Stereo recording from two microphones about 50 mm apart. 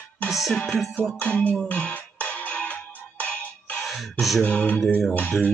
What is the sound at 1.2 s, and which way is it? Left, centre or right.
Speech, left.